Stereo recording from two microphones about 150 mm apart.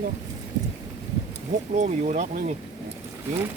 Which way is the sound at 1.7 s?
50° right (ahead or behind).